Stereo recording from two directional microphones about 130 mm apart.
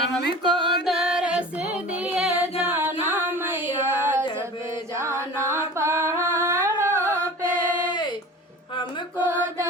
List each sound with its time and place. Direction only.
0.1 s music: 5° left (ahead or behind); by 7.6 s 20° right (ahead or behind)
9.1 s mantra: 20° right (ahead or behind)